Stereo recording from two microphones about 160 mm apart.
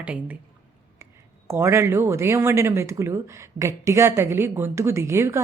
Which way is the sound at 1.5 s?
15° right (ahead or behind).